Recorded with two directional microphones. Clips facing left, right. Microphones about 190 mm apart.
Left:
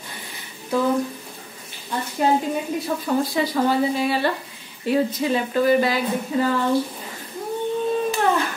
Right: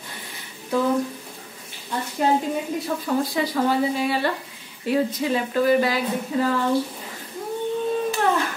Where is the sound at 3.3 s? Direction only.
30° left (ahead or behind).